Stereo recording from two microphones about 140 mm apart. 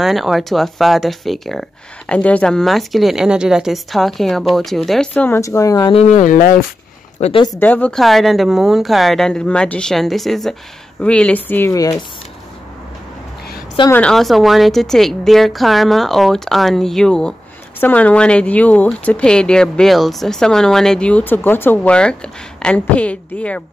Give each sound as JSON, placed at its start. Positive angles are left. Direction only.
{"t": 0.0, "sound": "speech", "side_deg": 0}
{"t": 6.1, "sound": "speech", "side_deg": 70}
{"t": 7.2, "sound": "speech", "side_deg": 45}
{"t": 7.6, "sound": "speech", "side_deg": 10}
{"t": 14.0, "sound": "speech", "side_deg": 0}